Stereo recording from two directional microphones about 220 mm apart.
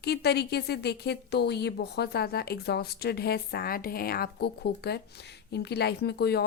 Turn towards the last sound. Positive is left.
turn(degrees=50)  # may be behind; listen again after turning